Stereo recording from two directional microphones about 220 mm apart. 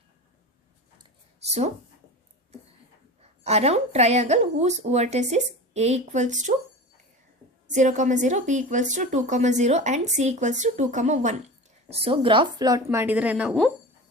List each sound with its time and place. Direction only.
0.9 s a sound: 30° right (ahead or behind)
3.4 s a woman's voice: 30° right (ahead or behind)
7.7 s a woman's voice: 35° right (ahead or behind); by 13.7 s 5° right (ahead or behind)